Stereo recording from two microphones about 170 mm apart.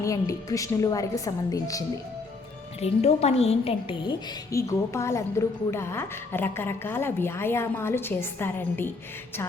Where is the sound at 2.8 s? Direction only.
40° left (ahead or behind).